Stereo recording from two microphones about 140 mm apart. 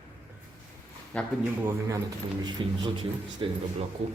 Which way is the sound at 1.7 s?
25° right (ahead or behind).